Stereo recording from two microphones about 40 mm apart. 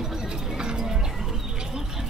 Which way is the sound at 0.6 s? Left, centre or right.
Right.